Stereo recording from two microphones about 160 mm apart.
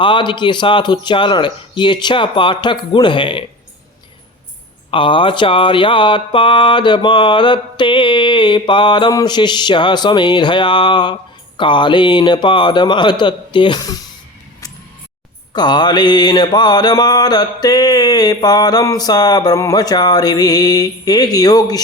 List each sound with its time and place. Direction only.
0.0 s mantra: 30° left (ahead or behind)
4.9 s mantra: 30° left (ahead or behind)
15.5 s mantra: 25° left (ahead or behind)